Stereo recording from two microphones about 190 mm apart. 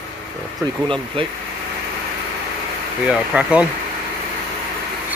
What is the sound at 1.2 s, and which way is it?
Speech, 30° right (ahead or behind).